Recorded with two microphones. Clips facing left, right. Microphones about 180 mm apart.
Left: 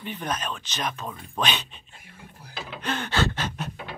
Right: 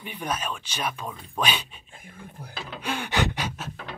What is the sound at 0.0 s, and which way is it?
Speech, 10° right (ahead or behind).